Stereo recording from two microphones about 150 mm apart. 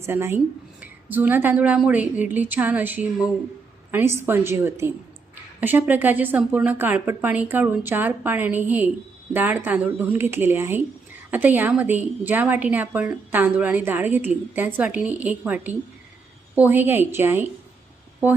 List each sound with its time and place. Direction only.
0.0 s a woman's voice: 15° right (ahead or behind)